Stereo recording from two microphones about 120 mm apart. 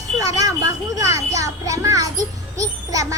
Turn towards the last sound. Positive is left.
turn(degrees=-30)  # may be behind; listen again after turning